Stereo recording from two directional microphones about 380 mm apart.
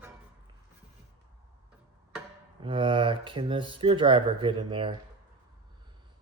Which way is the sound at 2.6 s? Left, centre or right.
Centre.